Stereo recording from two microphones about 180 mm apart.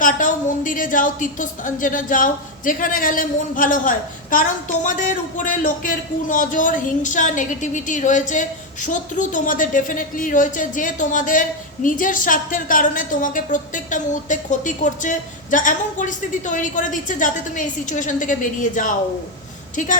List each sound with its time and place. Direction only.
0.0 s a woman's voice: 45° left (ahead or behind)